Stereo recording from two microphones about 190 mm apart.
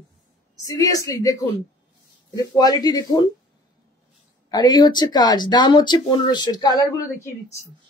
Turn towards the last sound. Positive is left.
turn(degrees=20)  # may be behind; listen again after turning